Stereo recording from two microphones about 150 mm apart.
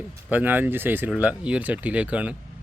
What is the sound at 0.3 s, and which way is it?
Speech, 10° right (ahead or behind).